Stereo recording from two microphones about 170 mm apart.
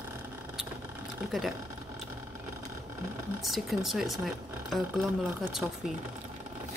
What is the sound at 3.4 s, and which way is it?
Speech, centre (ahead or behind).